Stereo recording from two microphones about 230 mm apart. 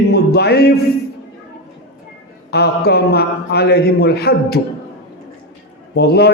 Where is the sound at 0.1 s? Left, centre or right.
Left.